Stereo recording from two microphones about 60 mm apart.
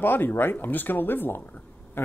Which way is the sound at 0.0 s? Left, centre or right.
Left.